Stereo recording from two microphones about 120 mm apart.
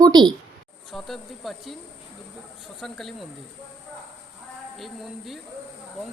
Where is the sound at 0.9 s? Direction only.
Centre (ahead or behind).